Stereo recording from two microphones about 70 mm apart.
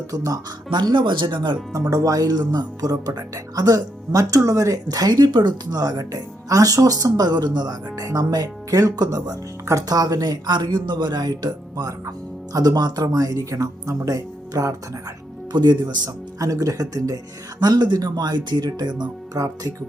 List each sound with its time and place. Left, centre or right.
0.3 s speech: right
1.9 s speech: right
12.5 s speech: right
15.5 s speech: right
17.6 s speech: right